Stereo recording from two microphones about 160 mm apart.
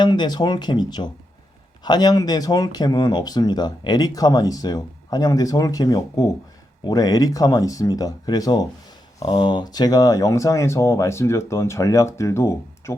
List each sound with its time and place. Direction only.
0.0 s speech: 25° left (ahead or behind)